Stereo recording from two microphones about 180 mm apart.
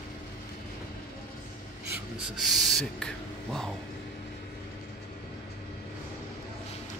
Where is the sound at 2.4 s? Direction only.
Centre (ahead or behind).